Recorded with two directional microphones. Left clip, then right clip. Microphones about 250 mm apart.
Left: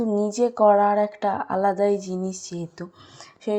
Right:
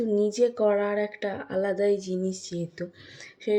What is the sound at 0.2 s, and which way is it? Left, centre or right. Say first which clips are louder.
Speech: left 4 dB; centre.